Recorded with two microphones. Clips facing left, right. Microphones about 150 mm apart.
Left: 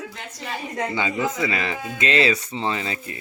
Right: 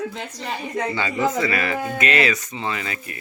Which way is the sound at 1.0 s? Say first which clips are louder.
Right 2 dB; 15° left (ahead or behind).